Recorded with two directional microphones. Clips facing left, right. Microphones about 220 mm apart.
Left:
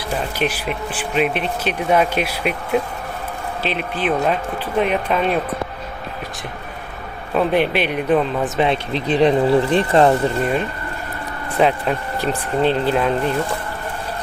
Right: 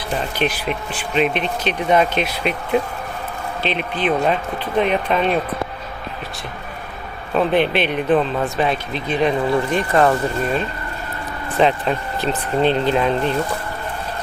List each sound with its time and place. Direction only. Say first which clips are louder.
0.1 s speech: even; 10° left (ahead or behind)
7.3 s speech: even; 5° left (ahead or behind)
8.5 s speech: left 2 dB; 25° left (ahead or behind); by 13.3 s 5° left (ahead or behind)